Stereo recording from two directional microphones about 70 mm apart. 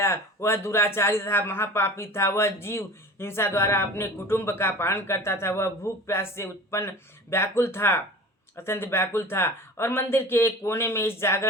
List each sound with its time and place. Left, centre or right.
0.0 s a man's voice: left